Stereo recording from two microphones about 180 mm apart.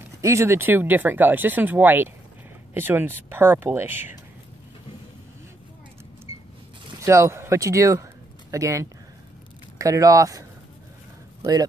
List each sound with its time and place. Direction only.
0.2 s speech: 15° right (ahead or behind)
6.3 s vehicle: 35° left (ahead or behind)
7.0 s speech: 15° right (ahead or behind)